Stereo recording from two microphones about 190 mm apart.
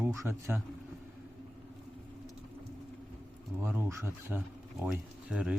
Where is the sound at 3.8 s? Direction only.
10° right (ahead or behind).